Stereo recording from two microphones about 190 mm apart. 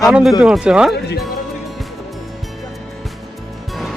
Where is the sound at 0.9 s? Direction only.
60° left (ahead or behind).